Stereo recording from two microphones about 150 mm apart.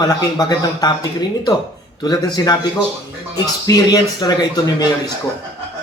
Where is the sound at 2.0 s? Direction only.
25° left (ahead or behind).